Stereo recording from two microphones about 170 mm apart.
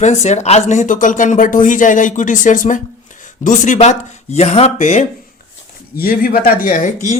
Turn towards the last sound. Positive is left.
turn(degrees=50)  # may be behind; listen again after turning